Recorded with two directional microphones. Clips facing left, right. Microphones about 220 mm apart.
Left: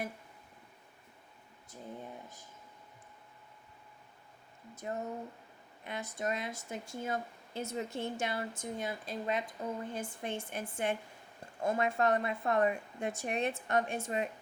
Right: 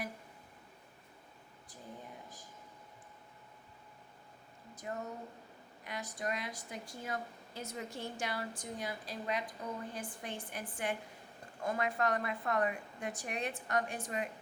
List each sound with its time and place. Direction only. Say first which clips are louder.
4.7 s speech: left 3 dB; 25° left (ahead or behind)